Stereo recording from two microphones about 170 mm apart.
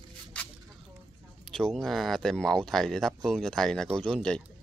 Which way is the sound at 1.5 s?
5° left (ahead or behind).